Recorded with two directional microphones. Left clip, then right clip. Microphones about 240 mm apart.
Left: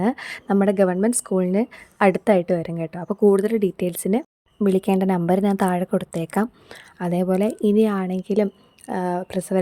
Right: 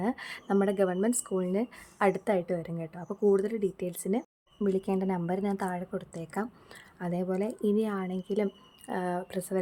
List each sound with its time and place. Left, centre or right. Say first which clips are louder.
0.0 s a woman's voice: left 9 dB; left